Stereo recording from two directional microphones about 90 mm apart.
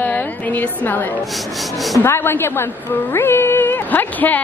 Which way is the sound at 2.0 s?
25° left (ahead or behind).